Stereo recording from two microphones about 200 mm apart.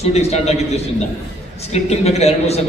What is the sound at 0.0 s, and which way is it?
Speech, 30° left (ahead or behind).